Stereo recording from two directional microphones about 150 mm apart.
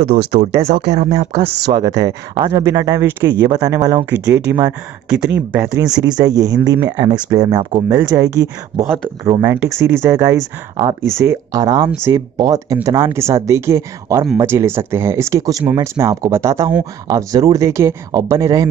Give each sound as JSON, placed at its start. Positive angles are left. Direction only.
{"t": 0.0, "sound": "speech", "side_deg": -90}
{"t": 0.9, "sound": "speech", "side_deg": -45}
{"t": 1.7, "sound": "speech", "side_deg": -25}
{"t": 4.0, "sound": "speech", "side_deg": -15}